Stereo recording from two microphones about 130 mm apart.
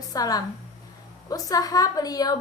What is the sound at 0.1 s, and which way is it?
A woman's voice, 30° left (ahead or behind).